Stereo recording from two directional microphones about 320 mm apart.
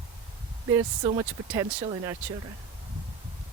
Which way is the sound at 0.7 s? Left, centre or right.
Centre.